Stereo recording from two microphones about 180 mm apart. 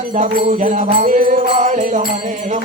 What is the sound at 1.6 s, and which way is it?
Jingle bell, 45° right (ahead or behind).